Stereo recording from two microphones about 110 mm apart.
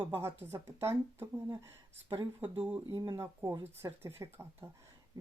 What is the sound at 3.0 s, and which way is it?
Speech, 35° right (ahead or behind).